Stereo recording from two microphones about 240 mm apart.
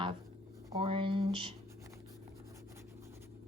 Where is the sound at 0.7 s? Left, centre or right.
Right.